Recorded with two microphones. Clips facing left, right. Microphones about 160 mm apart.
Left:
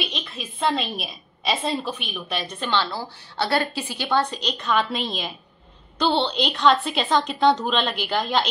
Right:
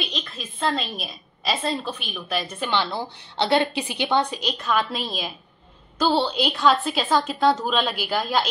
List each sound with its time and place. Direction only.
0.0 s a woman's voice: centre (ahead or behind)
2.6 s a woman's voice: 15° right (ahead or behind)